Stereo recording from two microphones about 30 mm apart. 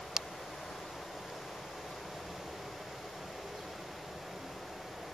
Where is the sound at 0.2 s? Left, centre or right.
Centre.